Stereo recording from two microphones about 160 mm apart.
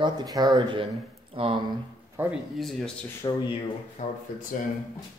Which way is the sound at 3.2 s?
20° left (ahead or behind).